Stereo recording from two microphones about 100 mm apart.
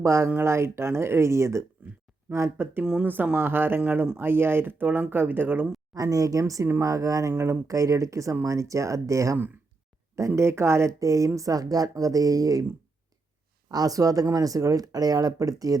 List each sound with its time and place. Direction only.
0.0 s speech: 25° right (ahead or behind)
2.8 s speech: 15° right (ahead or behind)
5.9 s speech: 35° right (ahead or behind)
13.7 s speech: 40° right (ahead or behind)